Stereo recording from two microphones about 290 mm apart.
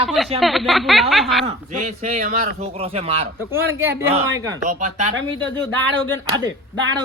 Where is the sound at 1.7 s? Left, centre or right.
Right.